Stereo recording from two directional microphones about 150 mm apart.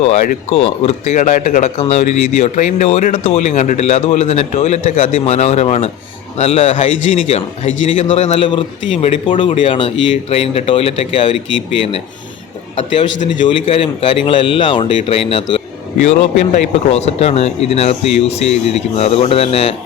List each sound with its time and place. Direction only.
0.5 s a man's voice: 40° left (ahead or behind)
8.4 s speech: 35° left (ahead or behind)
13.2 s speech: 35° left (ahead or behind)
16.5 s speech: 45° left (ahead or behind)